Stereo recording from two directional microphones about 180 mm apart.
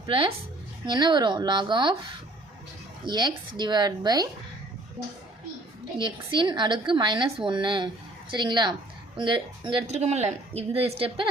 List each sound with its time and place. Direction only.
0.0 s a woman's voice: 30° right (ahead or behind)
3.1 s a woman's voice: 25° right (ahead or behind)
6.0 s a woman's voice: 25° right (ahead or behind)
9.8 s a woman's voice: 40° right (ahead or behind)